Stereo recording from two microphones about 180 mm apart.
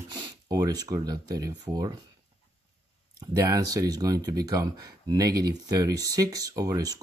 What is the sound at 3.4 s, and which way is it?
Speech, 20° right (ahead or behind).